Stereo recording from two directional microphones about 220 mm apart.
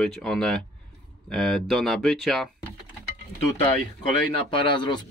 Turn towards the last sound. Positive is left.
turn(degrees=20)  # may be behind; listen again after turning